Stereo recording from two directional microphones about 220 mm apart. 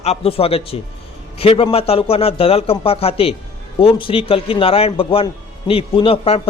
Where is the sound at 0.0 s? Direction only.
30° left (ahead or behind).